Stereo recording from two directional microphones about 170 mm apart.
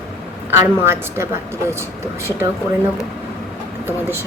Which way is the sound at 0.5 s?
15° right (ahead or behind).